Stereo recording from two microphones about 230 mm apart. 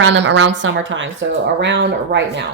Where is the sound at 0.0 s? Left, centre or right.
Right.